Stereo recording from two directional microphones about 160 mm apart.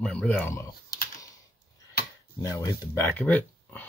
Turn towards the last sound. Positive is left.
turn(degrees=10)  # may be behind; listen again after turning